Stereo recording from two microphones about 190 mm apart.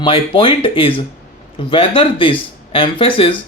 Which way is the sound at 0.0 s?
25° left (ahead or behind).